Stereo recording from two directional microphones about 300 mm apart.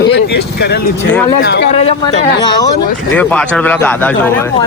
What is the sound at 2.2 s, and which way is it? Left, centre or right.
Speech, centre.